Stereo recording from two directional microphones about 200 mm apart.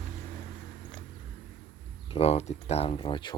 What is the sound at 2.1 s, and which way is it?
Speech, 30° left (ahead or behind).